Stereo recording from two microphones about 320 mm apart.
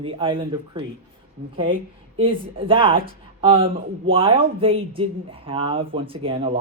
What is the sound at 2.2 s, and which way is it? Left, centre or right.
Speech, centre.